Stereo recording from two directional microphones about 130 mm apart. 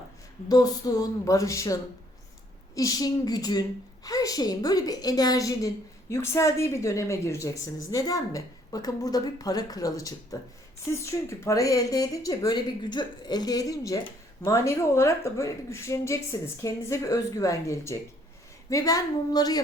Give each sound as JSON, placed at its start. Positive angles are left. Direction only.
{"t": 0.4, "sound": "a woman's voice", "side_deg": 30}